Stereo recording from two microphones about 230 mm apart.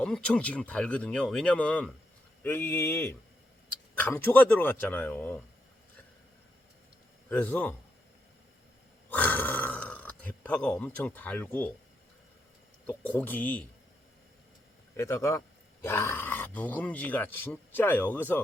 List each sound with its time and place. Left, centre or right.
0.0 s speech: centre
7.3 s speech: centre
9.0 s speech: centre
12.9 s speech: centre
14.9 s speech: centre